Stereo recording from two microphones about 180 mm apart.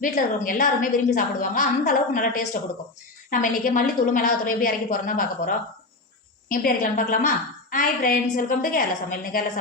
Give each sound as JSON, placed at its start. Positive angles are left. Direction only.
{"t": 0.0, "sound": "a woman's voice", "side_deg": 45}